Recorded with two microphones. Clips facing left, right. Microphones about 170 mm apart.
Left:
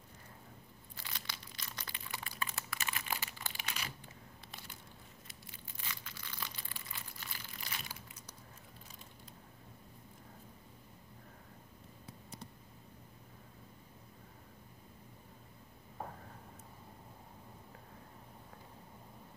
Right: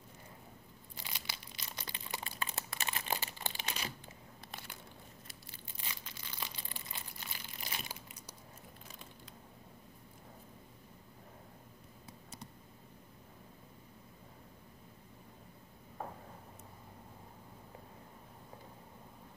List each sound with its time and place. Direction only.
0.9 s crumpling: 15° right (ahead or behind)
4.5 s a sound: 60° right (ahead or behind)
5.8 s crumpling: 20° right (ahead or behind)